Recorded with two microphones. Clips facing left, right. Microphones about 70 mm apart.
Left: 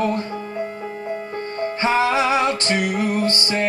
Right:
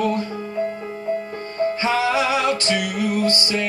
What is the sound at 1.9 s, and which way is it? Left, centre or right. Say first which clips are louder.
Music: left 4 dB; left.